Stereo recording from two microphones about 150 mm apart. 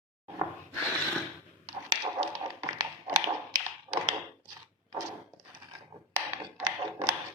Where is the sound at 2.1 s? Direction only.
30° right (ahead or behind).